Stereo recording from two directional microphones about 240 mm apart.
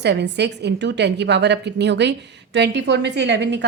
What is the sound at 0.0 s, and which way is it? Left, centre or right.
A woman's voice, right.